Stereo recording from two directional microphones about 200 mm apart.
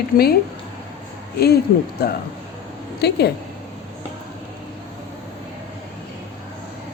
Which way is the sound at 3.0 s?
55° left (ahead or behind).